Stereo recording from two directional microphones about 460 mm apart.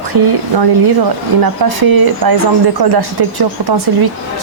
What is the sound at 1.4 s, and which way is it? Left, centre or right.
A woman's voice, right.